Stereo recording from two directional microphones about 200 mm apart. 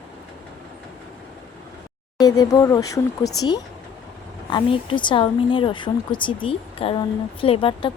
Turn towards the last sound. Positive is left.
turn(degrees=25)  # may be behind; listen again after turning